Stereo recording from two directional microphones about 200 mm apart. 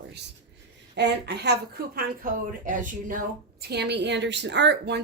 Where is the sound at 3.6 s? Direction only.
55° right (ahead or behind).